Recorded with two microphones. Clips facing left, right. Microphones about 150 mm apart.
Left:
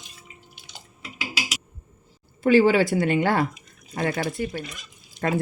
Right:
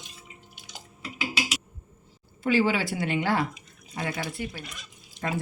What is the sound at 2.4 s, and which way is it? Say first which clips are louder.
Speech: left 7 dB; 45° left (ahead or behind).